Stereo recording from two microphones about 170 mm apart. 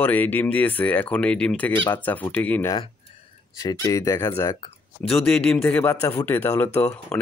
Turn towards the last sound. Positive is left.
turn(degrees=10)  # may be behind; listen again after turning